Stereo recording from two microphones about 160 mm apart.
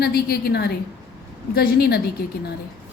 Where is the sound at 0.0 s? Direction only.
85° left.